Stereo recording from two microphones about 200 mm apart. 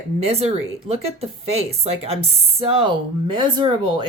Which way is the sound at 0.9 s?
30° right (ahead or behind).